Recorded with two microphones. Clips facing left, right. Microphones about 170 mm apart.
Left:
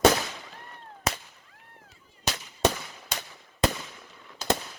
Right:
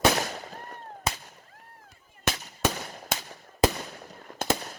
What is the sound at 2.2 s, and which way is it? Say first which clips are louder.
Firecracker: left 2 dB; 45° right (ahead or behind).